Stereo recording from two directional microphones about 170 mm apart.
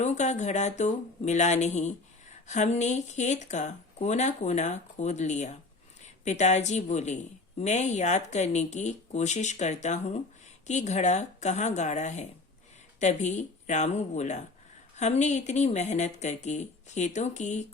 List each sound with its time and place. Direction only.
0.0 s speech: 45° left (ahead or behind)